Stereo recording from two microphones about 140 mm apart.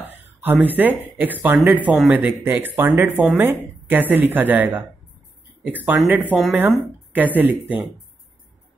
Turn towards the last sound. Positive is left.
turn(degrees=-10)  # may be behind; listen again after turning